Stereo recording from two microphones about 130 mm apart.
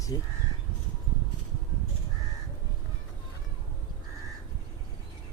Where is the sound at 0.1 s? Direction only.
30° left (ahead or behind).